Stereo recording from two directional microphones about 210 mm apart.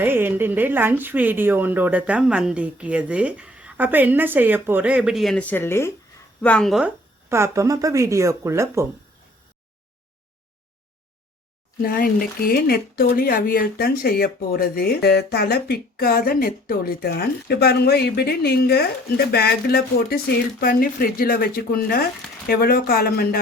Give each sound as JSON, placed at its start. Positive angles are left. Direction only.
{"t": 0.0, "sound": "a woman's voice", "side_deg": -10}
{"t": 7.3, "sound": "a woman's voice", "side_deg": -15}
{"t": 11.8, "sound": "speech", "side_deg": 45}